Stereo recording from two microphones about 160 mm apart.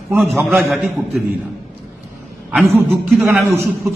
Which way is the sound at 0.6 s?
5° right (ahead or behind).